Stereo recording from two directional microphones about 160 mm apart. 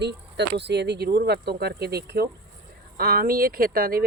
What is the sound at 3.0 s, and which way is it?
Speech, 70° right (ahead or behind).